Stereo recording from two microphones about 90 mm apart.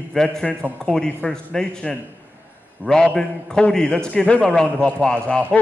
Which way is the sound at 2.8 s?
20° right (ahead or behind).